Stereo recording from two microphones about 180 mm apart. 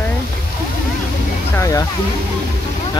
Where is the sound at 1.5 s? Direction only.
15° left (ahead or behind).